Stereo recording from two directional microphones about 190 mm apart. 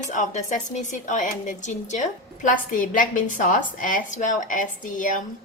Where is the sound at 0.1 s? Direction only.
40° left (ahead or behind).